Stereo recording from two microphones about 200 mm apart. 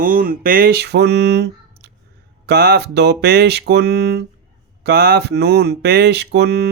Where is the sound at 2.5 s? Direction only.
55° right (ahead or behind).